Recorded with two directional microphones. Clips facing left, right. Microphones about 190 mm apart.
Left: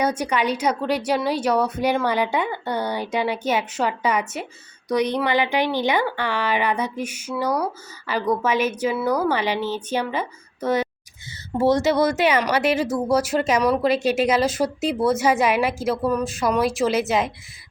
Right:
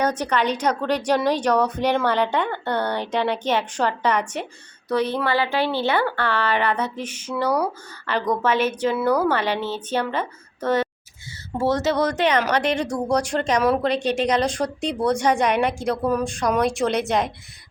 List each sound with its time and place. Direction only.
0.0 s a woman's voice: 10° left (ahead or behind)